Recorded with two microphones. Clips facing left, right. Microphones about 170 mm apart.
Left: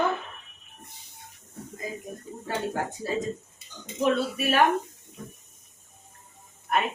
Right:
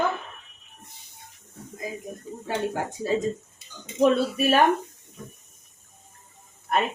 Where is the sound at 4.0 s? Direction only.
40° right (ahead or behind).